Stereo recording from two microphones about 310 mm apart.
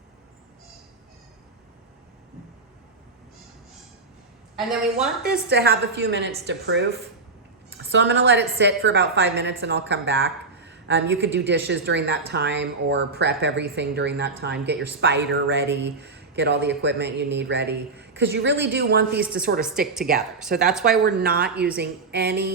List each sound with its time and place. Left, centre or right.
4.5 s a woman's voice: centre
5.5 s a woman's voice: right
19.2 s a woman's voice: centre
21.0 s a woman's voice: right